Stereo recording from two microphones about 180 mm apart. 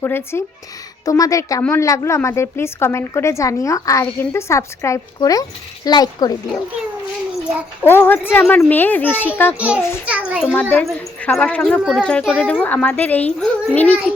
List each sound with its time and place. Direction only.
0.0 s a woman's voice: 15° left (ahead or behind)
7.9 s a woman's voice: 10° left (ahead or behind)
9.6 s a child's voice: 5° right (ahead or behind)
10.4 s a woman's voice: 10° left (ahead or behind)